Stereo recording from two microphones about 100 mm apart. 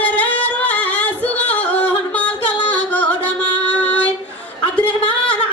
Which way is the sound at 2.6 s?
15° left (ahead or behind).